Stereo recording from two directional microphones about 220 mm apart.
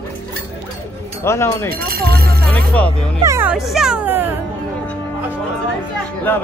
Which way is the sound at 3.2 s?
10° right (ahead or behind).